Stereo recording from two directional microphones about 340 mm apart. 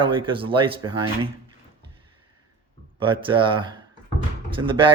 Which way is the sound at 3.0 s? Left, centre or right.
Centre.